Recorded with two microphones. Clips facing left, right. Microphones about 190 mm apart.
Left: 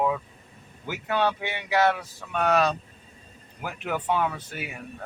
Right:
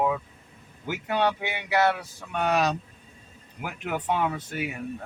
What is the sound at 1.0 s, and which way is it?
Speech, 15° right (ahead or behind).